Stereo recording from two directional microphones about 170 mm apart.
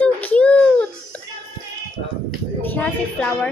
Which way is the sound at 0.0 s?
10° left (ahead or behind).